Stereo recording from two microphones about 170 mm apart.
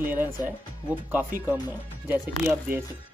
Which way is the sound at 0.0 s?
10° right (ahead or behind).